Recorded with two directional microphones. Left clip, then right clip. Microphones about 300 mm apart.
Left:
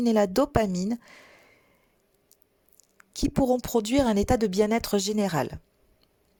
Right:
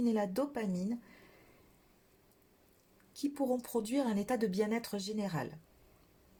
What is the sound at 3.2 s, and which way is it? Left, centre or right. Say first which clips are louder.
Speech: left 10 dB; left.